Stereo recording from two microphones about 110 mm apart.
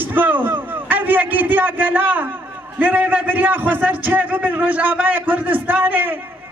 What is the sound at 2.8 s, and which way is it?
A man's voice, 15° right (ahead or behind).